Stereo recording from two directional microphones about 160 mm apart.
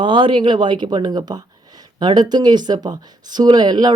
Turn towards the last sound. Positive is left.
turn(degrees=-25)  # may be behind; listen again after turning